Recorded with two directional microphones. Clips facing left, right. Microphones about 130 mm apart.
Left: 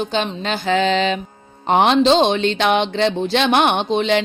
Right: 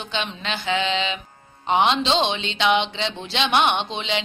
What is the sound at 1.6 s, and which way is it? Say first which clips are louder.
Speech: left 6 dB; 50° left (ahead or behind).